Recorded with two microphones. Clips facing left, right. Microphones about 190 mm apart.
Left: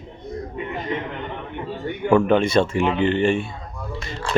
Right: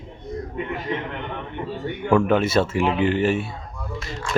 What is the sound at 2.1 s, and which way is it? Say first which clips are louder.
Speech: left 2 dB; 5° right (ahead or behind).